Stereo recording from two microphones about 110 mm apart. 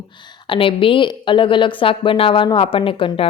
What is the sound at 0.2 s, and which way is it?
A woman's voice, 45° left (ahead or behind).